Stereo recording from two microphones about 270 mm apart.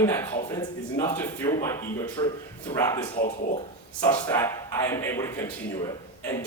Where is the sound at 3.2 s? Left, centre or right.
Left.